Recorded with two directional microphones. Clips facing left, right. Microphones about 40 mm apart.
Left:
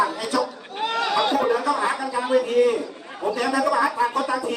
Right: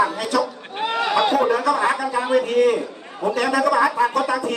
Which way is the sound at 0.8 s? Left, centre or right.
Centre.